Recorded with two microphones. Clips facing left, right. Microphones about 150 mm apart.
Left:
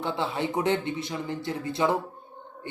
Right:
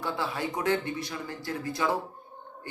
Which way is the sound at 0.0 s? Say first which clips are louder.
Left 3 dB; 25° left (ahead or behind).